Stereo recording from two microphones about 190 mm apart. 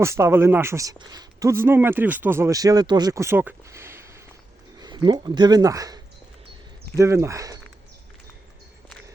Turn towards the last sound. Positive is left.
turn(degrees=-15)  # may be behind; listen again after turning